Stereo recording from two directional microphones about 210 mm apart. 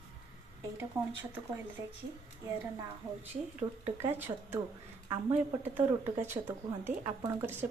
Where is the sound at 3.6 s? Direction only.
20° right (ahead or behind).